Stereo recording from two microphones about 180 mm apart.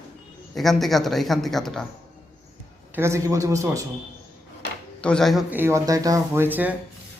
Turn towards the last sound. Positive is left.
turn(degrees=-10)  # may be behind; listen again after turning